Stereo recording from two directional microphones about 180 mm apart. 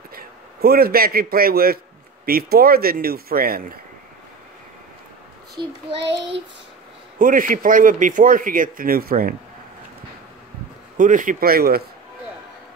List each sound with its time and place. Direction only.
0.1 s a man's voice: 55° right (ahead or behind)
6.0 s child singing: 75° right (ahead or behind)
7.2 s a man's voice: 50° right (ahead or behind)
11.0 s speech: 45° right (ahead or behind)